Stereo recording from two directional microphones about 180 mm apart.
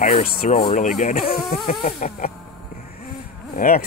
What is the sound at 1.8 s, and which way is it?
Snake, 40° left (ahead or behind).